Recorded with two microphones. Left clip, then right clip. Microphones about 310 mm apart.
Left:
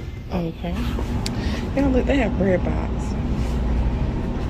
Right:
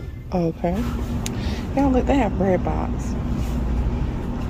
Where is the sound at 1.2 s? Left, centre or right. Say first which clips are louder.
Left 2 dB; centre.